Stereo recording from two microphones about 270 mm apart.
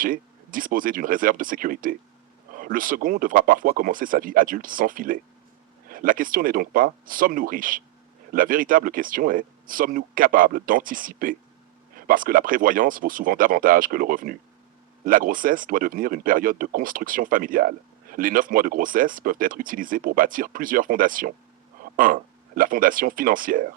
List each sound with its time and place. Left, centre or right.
0.0 s speech: right